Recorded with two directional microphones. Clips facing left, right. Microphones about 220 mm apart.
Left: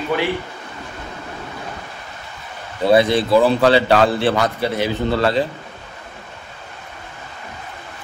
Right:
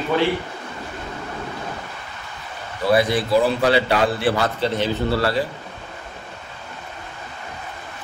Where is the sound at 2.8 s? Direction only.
25° left (ahead or behind).